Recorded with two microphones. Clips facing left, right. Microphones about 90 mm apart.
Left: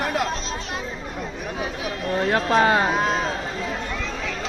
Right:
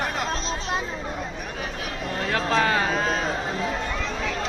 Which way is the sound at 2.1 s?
25° left (ahead or behind).